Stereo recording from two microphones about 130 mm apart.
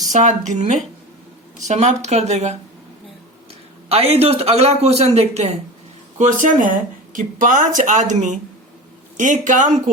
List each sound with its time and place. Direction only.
0.0 s speech: 70° right (ahead or behind)
3.8 s a man's voice: 50° right (ahead or behind)
6.1 s speech: 75° right (ahead or behind)